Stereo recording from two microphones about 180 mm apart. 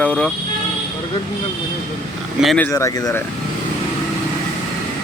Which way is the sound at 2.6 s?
20° left (ahead or behind).